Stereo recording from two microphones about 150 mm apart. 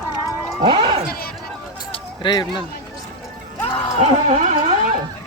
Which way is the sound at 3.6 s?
35° left (ahead or behind).